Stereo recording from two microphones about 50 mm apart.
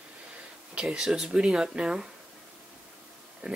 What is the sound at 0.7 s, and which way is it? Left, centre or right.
Speech, centre.